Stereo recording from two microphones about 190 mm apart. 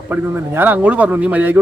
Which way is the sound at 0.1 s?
10° right (ahead or behind).